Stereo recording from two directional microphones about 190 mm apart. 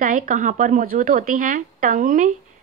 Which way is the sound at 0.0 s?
45° right (ahead or behind).